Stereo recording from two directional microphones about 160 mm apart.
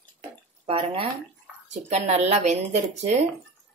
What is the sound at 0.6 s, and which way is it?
A woman's voice, 35° right (ahead or behind).